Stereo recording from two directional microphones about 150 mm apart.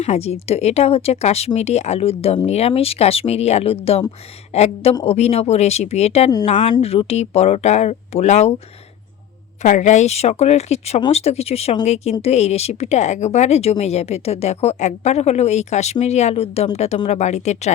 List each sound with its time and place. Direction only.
0.0 s a woman's voice: 45° left (ahead or behind)
9.6 s a woman's voice: 55° left (ahead or behind)